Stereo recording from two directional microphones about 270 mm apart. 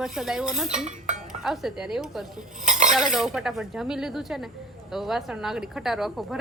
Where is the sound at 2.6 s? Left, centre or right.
Right.